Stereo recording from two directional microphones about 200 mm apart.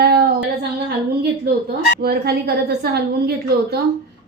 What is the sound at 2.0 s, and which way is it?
A woman's voice, 50° right (ahead or behind).